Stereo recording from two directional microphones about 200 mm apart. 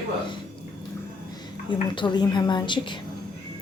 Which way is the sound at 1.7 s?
25° left (ahead or behind).